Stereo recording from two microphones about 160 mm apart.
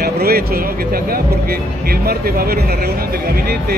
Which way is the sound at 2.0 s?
75° right (ahead or behind).